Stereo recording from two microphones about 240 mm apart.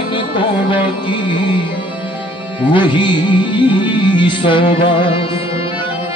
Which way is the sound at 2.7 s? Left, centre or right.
Centre.